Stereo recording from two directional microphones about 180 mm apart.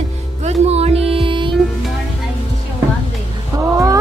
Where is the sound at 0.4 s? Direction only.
35° right (ahead or behind).